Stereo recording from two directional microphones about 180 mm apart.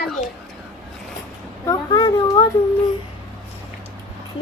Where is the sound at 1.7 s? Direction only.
25° left (ahead or behind).